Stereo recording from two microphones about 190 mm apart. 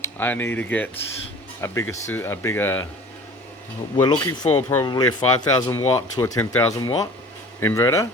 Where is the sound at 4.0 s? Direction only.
20° left (ahead or behind).